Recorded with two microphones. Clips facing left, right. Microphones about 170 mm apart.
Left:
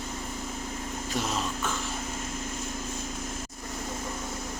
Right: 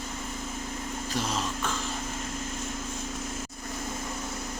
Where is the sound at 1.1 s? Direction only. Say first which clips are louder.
Even; centre (ahead or behind).